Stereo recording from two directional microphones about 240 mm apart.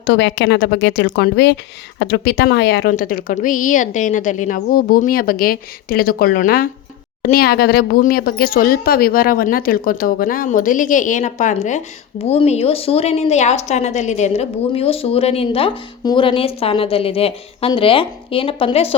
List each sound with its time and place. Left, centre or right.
0.0 s speech: left